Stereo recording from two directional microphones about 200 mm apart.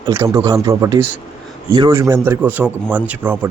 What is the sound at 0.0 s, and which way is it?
Speech, 15° right (ahead or behind).